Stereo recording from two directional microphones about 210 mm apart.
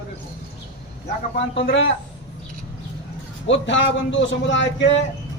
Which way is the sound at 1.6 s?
60° left (ahead or behind).